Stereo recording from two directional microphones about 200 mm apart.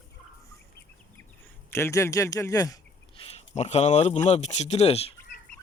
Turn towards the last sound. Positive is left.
turn(degrees=30)  # may be behind; listen again after turning